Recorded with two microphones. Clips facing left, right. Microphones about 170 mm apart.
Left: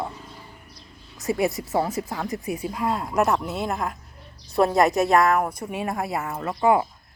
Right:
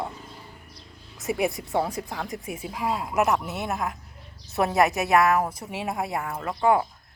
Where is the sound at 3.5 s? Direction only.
20° right (ahead or behind).